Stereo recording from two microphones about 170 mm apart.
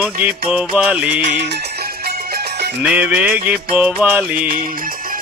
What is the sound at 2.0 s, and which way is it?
Music, 70° right (ahead or behind).